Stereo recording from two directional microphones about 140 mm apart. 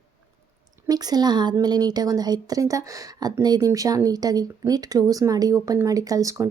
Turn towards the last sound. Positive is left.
turn(degrees=-20)  # may be behind; listen again after turning